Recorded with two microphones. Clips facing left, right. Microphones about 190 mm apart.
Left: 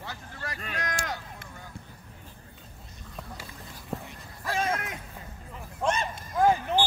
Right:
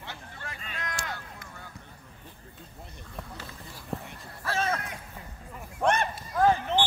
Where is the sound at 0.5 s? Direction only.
70° left (ahead or behind).